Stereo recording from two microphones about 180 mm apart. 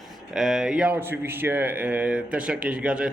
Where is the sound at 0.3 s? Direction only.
Centre (ahead or behind).